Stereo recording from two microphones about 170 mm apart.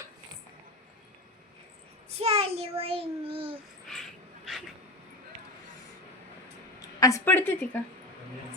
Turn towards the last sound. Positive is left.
turn(degrees=10)  # may be behind; listen again after turning